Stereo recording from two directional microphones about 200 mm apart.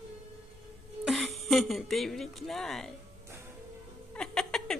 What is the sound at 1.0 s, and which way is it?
Speech, centre (ahead or behind).